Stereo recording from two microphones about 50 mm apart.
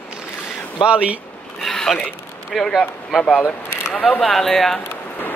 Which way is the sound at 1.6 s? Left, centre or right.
Centre.